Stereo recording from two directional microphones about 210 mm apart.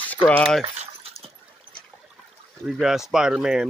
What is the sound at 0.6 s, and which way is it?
Keys jangling, 30° right (ahead or behind).